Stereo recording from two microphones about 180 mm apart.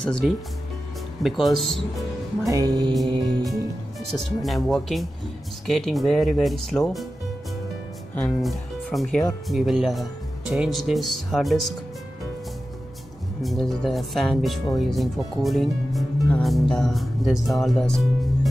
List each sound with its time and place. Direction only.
0.0 s speech: 5° left (ahead or behind)
2.5 s music: 20° right (ahead or behind)
4.1 s speech: centre (ahead or behind)
8.1 s speech: 10° left (ahead or behind)
8.4 s speech: centre (ahead or behind)
13.4 s speech: centre (ahead or behind)